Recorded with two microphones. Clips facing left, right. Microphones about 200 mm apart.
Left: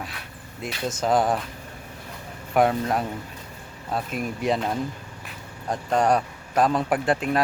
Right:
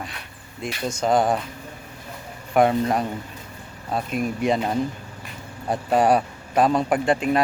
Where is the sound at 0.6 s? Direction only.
5° left (ahead or behind).